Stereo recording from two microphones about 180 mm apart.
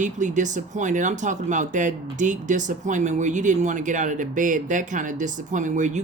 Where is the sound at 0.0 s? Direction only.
45° right (ahead or behind).